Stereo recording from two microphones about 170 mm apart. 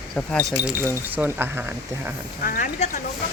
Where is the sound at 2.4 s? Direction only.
55° left (ahead or behind).